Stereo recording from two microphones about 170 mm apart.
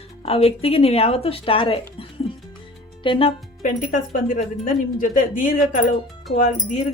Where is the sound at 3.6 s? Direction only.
50° left (ahead or behind).